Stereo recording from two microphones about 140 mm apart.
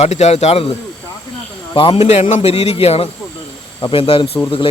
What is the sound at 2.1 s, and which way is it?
A man's voice, 55° left (ahead or behind).